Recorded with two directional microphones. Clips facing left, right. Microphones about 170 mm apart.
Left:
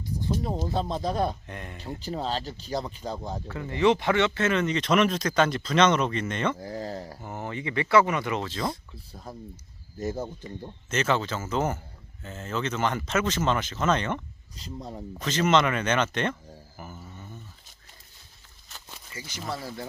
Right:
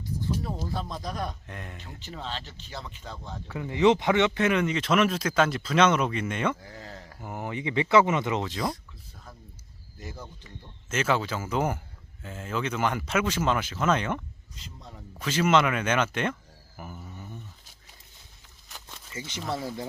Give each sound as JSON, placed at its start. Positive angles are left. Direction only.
{"t": 0.4, "sound": "speech", "side_deg": 20}
{"t": 1.5, "sound": "speech", "side_deg": 0}
{"t": 1.8, "sound": "speech", "side_deg": 35}
{"t": 3.5, "sound": "speech", "side_deg": -15}
{"t": 6.6, "sound": "a sound", "side_deg": 35}
{"t": 7.2, "sound": "speech", "side_deg": -10}
{"t": 8.7, "sound": "speech", "side_deg": 35}
{"t": 10.8, "sound": "speech", "side_deg": -5}
{"t": 14.5, "sound": "speech", "side_deg": 35}
{"t": 15.2, "sound": "speech", "side_deg": -10}
{"t": 16.7, "sound": "a sound", "side_deg": 0}
{"t": 17.1, "sound": "a sound", "side_deg": -15}
{"t": 18.7, "sound": "a sound", "side_deg": -15}
{"t": 19.1, "sound": "speech", "side_deg": -25}